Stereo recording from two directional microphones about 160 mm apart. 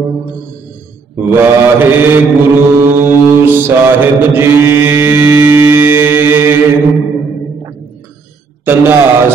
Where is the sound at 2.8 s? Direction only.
15° right (ahead or behind).